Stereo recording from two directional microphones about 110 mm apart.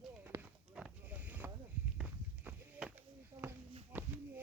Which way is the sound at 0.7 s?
5° right (ahead or behind).